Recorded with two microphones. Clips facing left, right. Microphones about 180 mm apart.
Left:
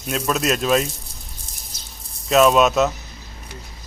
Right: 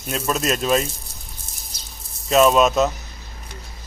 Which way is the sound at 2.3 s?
Centre (ahead or behind).